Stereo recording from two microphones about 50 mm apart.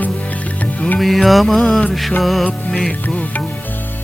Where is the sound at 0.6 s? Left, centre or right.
Left.